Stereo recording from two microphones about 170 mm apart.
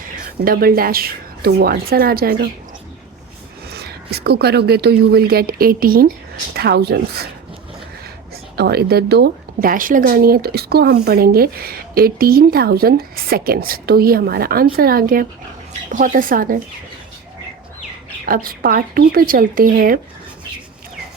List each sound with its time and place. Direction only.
0.0 s speech: 60° right (ahead or behind)
3.7 s speech: 70° right (ahead or behind)
6.5 s speech: 70° right (ahead or behind)
8.5 s a woman's voice: 70° right (ahead or behind)
18.3 s a woman's voice: 60° right (ahead or behind)